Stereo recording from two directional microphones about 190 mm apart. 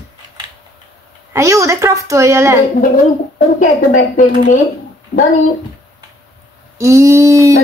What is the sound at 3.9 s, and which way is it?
Speech, 40° left (ahead or behind).